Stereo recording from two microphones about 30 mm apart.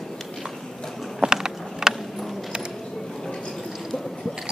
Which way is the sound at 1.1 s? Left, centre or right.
Centre.